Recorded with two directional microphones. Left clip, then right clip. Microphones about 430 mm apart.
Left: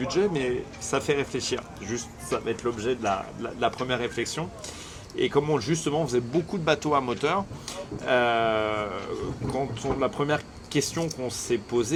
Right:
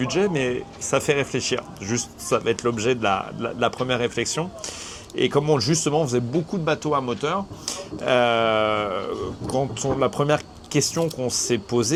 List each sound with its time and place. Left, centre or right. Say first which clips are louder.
0.0 s speech: right 3 dB; right
5.1 s speech: right 4 dB; right; by 7.4 s centre
7.6 s speech: right 5 dB; right